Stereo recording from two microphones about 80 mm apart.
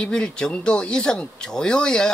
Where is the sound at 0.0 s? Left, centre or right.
Centre.